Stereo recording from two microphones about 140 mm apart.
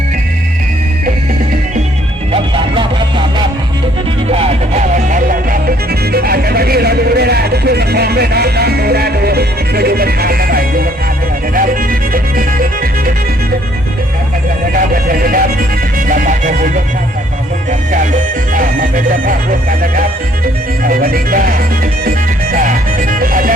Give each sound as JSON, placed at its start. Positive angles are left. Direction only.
{"t": 2.3, "sound": "music", "side_deg": -35}
{"t": 4.3, "sound": "music", "side_deg": -45}
{"t": 8.4, "sound": "music", "side_deg": -90}
{"t": 14.7, "sound": "vehicle", "side_deg": -90}
{"t": 16.0, "sound": "music", "side_deg": -75}
{"t": 17.7, "sound": "music", "side_deg": -65}
{"t": 20.8, "sound": "music", "side_deg": -90}
{"t": 22.5, "sound": "music", "side_deg": -75}